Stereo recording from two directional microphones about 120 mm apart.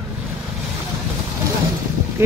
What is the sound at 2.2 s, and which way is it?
Speech, 20° right (ahead or behind).